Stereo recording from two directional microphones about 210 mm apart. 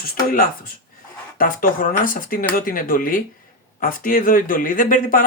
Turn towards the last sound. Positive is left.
turn(degrees=40)  # may be behind; listen again after turning